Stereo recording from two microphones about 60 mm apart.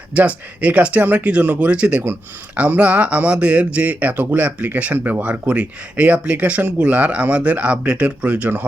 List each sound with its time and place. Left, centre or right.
0.1 s speech: right